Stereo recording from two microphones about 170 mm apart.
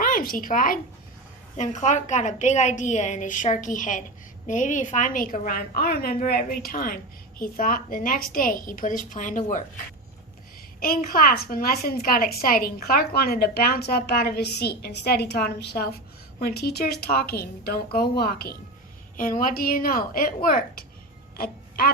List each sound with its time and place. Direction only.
0.0 s a woman's voice: 55° left (ahead or behind)
10.8 s a woman's voice: 60° left (ahead or behind)
19.1 s a woman's voice: 50° left (ahead or behind)
21.3 s a sound: 60° left (ahead or behind)